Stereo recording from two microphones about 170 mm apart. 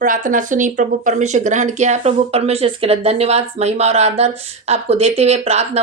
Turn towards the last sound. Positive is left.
turn(degrees=-40)  # may be behind; listen again after turning